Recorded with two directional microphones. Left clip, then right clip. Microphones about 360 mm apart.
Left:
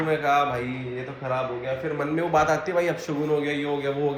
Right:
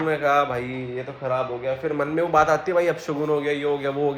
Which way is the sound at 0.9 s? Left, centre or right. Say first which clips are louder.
Right 3 dB; right.